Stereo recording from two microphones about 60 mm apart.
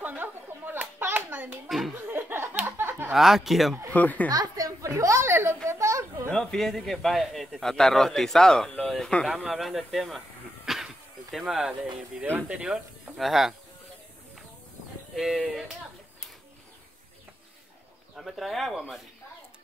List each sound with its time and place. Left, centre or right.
0.0 s a sound: right
3.1 s speech: centre
3.9 s speech: left
4.3 s a sound: right
5.7 s children playing: right
6.3 s a man's voice: centre
8.8 s a sound: centre
9.2 s speech: centre
13.2 s speech: centre
15.1 s speech: centre
18.1 s speech: centre